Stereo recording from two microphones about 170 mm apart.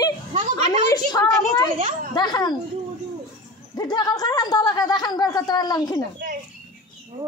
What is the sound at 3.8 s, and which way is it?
A woman's voice, 25° left (ahead or behind).